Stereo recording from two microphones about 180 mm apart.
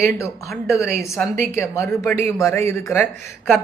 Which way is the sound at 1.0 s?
Centre (ahead or behind).